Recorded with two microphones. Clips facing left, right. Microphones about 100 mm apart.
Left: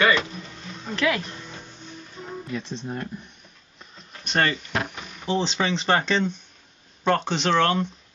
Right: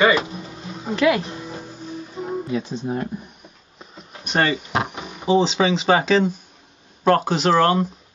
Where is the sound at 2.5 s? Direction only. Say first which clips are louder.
Right 4 dB; 5° right (ahead or behind).